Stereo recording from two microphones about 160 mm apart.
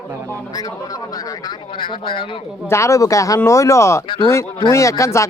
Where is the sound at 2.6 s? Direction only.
15° left (ahead or behind).